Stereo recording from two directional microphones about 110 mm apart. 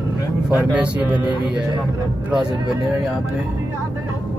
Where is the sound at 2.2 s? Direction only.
5° right (ahead or behind).